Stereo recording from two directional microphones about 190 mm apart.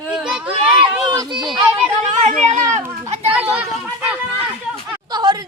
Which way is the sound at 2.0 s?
35° right (ahead or behind).